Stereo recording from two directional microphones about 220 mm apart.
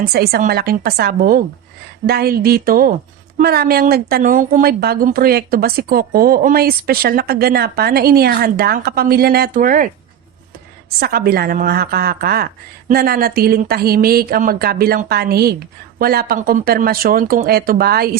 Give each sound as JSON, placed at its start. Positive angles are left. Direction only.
{"t": 0.0, "sound": "a woman's voice", "side_deg": -45}
{"t": 11.0, "sound": "a woman's voice", "side_deg": -45}